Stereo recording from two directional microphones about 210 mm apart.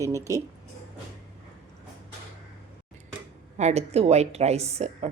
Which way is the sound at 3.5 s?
30° right (ahead or behind).